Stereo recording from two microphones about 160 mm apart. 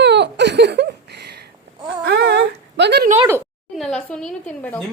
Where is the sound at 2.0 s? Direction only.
90° right.